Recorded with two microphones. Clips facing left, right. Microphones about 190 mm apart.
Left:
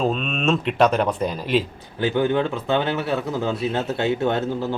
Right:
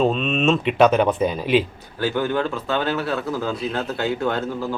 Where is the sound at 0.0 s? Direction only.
Centre (ahead or behind).